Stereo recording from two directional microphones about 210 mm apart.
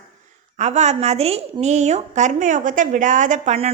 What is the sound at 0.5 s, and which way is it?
A woman's voice, 35° right (ahead or behind).